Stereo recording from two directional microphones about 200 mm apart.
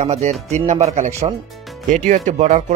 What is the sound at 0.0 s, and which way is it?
Speech, 35° right (ahead or behind).